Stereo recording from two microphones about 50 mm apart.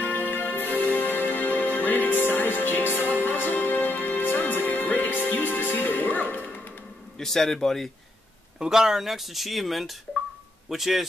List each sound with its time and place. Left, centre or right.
0.0 s music: left
7.2 s a man's voice: centre
8.5 s speech: centre